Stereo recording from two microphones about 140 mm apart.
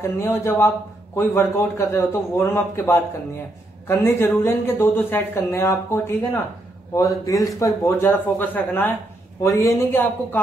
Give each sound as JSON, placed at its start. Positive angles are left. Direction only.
{"t": 0.0, "sound": "a man's voice", "side_deg": 20}